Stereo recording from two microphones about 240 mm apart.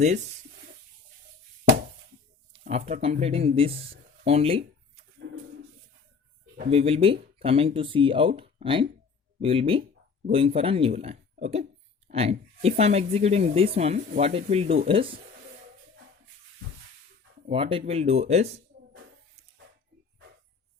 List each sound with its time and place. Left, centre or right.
2.5 s speech: right
6.6 s speech: right
17.5 s speech: right